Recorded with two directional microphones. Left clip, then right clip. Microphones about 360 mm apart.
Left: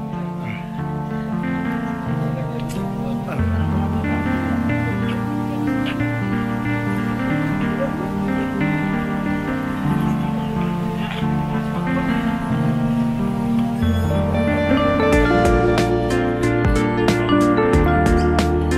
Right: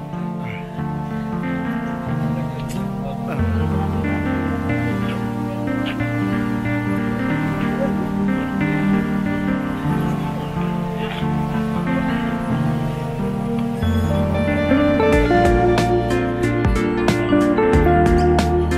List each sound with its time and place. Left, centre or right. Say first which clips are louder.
14.3 s music: even; centre